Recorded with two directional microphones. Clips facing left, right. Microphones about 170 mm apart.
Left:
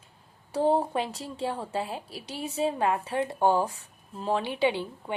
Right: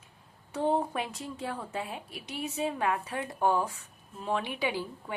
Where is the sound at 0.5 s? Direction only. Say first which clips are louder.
Left 4 dB; 35° left (ahead or behind).